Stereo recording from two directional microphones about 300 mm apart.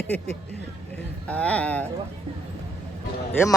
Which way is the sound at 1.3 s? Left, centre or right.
Centre.